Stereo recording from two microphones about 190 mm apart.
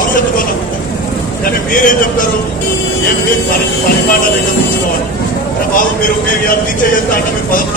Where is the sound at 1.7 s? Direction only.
45° left (ahead or behind).